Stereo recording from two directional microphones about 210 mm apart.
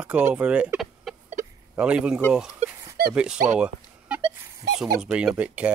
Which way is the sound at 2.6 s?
30° right (ahead or behind).